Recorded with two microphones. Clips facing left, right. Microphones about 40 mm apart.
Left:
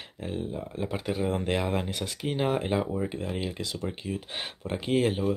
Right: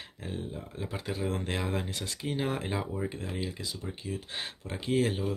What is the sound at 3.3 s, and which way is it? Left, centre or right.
Speech, left.